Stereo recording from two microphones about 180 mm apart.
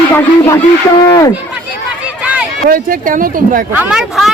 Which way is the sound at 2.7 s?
50° right (ahead or behind).